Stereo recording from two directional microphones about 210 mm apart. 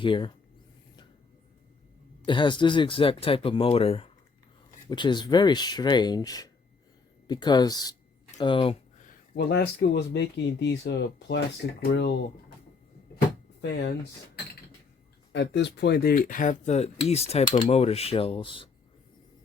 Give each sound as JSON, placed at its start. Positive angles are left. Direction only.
{"t": 0.0, "sound": "speech", "side_deg": 20}
{"t": 2.2, "sound": "speech", "side_deg": 25}
{"t": 9.3, "sound": "speech", "side_deg": 50}
{"t": 13.6, "sound": "speech", "side_deg": 55}
{"t": 15.3, "sound": "speech", "side_deg": 55}